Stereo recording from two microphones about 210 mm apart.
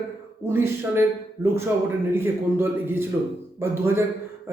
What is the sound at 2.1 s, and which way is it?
A man's voice, 10° right (ahead or behind).